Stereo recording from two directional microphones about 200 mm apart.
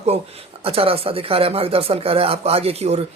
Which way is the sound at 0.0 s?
30° right (ahead or behind).